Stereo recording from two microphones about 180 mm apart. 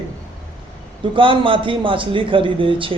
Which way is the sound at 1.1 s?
30° right (ahead or behind).